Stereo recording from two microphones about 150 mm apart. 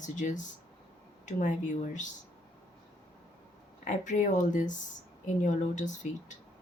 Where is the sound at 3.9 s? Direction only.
55° left (ahead or behind).